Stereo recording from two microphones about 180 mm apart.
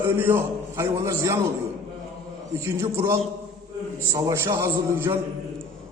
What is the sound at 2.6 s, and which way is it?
Speech, 15° right (ahead or behind).